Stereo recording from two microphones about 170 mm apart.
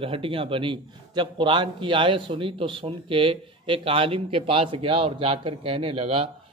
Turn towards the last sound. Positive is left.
turn(degrees=-35)  # may be behind; listen again after turning